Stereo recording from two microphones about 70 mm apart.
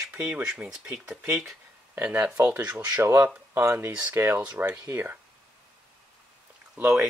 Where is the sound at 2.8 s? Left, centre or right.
Right.